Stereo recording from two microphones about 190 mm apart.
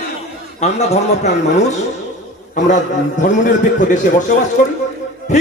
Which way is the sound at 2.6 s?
40° left (ahead or behind).